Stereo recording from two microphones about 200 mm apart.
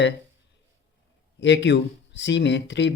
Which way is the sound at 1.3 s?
60° left (ahead or behind).